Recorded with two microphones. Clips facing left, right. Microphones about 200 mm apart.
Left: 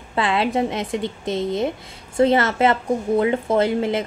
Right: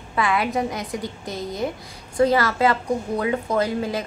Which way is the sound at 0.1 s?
25° left (ahead or behind).